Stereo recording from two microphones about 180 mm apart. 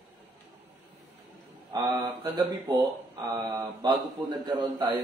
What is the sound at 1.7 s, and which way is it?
Mantra, 25° right (ahead or behind).